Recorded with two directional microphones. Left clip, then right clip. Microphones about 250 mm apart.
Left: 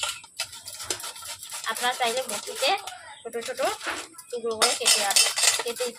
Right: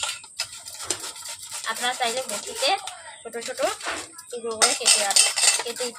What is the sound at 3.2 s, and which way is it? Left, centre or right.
Cutlery, centre.